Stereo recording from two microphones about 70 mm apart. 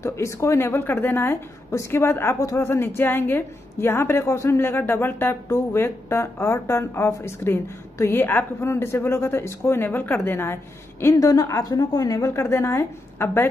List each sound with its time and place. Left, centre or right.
0.0 s speech: left
11.1 s a woman's voice: left